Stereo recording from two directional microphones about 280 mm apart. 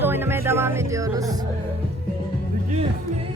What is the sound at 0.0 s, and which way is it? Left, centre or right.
Music, centre.